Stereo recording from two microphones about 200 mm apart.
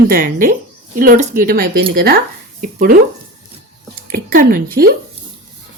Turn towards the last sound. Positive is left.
turn(degrees=-50)  # may be behind; listen again after turning